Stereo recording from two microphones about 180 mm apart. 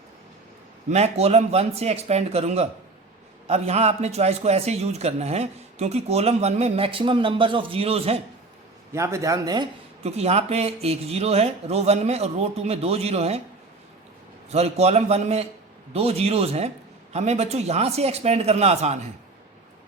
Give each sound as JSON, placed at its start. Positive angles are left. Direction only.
{"t": 0.9, "sound": "a man's voice", "side_deg": -35}
{"t": 8.9, "sound": "speech", "side_deg": -15}
{"t": 10.0, "sound": "a man's voice", "side_deg": -35}
{"t": 14.5, "sound": "a man's voice", "side_deg": -35}